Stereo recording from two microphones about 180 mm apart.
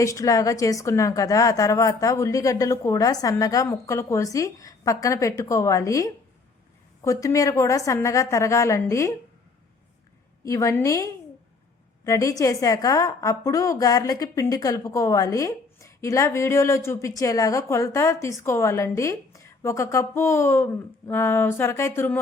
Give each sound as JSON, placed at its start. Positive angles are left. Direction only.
{"t": 0.0, "sound": "a woman's voice", "side_deg": 20}
{"t": 10.4, "sound": "a woman's voice", "side_deg": 15}